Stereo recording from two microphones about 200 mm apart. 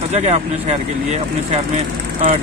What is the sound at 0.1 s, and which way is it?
Speech, 35° right (ahead or behind).